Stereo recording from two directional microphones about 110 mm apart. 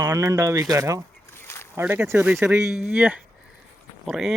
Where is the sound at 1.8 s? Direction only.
20° right (ahead or behind).